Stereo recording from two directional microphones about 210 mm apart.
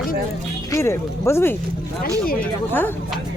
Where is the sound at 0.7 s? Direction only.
15° left (ahead or behind).